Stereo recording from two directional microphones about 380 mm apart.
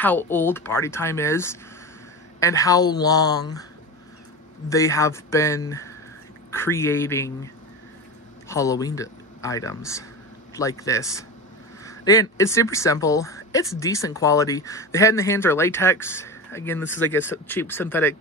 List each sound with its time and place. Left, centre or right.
0.0 s speech: centre
4.6 s speech: centre
8.5 s speech: centre